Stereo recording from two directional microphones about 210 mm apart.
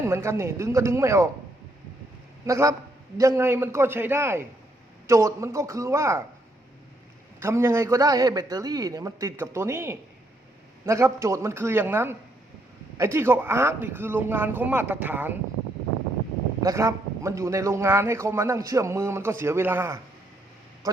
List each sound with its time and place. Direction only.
0.0 s a man's voice: 15° right (ahead or behind)
2.5 s a man's voice: 15° right (ahead or behind)
7.3 s a man's voice: 10° right (ahead or behind)
16.6 s a man's voice: 15° right (ahead or behind)